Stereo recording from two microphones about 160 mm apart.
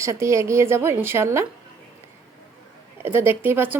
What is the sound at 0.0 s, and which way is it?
Speech, 15° right (ahead or behind).